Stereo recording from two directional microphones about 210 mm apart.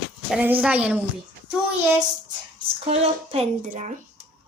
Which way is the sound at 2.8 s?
30° right (ahead or behind).